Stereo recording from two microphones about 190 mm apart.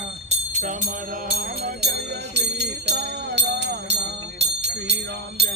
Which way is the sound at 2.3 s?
60° right (ahead or behind).